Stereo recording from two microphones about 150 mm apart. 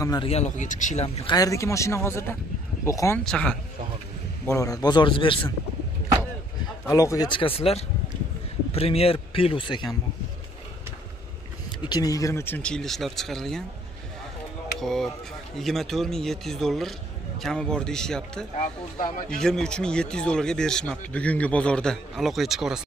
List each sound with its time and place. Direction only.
0.2 s speech: 45° left (ahead or behind)
1.0 s speech: 30° left (ahead or behind)
3.3 s speech: 5° left (ahead or behind)
4.5 s speech: 20° left (ahead or behind)
6.9 s speech: 20° left (ahead or behind)
7.2 s speech: 35° left (ahead or behind)
11.8 s speech: 25° left (ahead or behind); by 13.7 s centre (ahead or behind)
14.8 s speech: centre (ahead or behind)